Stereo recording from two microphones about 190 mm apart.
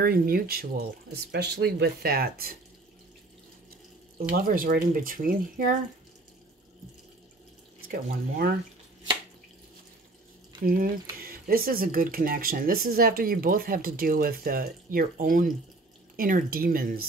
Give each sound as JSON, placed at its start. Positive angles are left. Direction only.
{"t": 0.0, "sound": "speech", "side_deg": -50}
{"t": 4.5, "sound": "speech", "side_deg": -50}
{"t": 7.9, "sound": "speech", "side_deg": -50}
{"t": 10.6, "sound": "speech", "side_deg": -50}